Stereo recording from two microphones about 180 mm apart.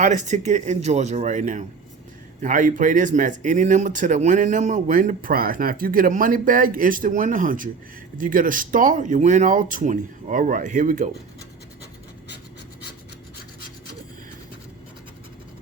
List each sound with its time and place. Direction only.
0.0 s speech: 40° right (ahead or behind)